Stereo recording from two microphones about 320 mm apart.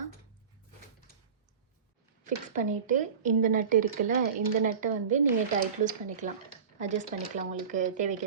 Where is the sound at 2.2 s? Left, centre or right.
Right.